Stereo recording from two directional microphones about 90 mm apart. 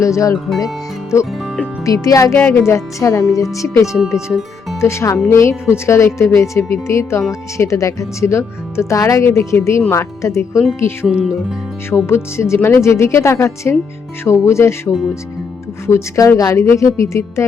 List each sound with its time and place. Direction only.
0.0 s a woman's voice: 35° left (ahead or behind)
2.3 s a woman's voice: 25° left (ahead or behind)
11.0 s speech: 10° right (ahead or behind)
12.0 s a woman's voice: 30° left (ahead or behind)